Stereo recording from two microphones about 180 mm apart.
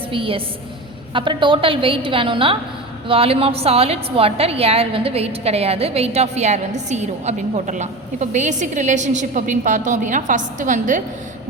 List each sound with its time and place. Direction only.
0.1 s a woman's voice: 30° right (ahead or behind)